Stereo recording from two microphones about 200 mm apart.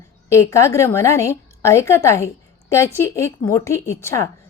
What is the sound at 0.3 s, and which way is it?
A woman's voice, 15° left (ahead or behind).